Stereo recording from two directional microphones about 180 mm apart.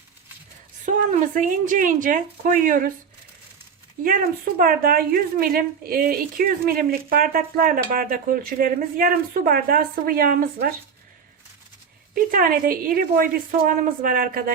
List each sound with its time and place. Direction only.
0.9 s a woman's voice: 45° right (ahead or behind)
4.0 s a woman's voice: 50° right (ahead or behind)
12.1 s a woman's voice: 55° right (ahead or behind)